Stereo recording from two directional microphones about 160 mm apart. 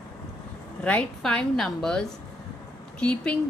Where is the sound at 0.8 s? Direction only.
5° left (ahead or behind).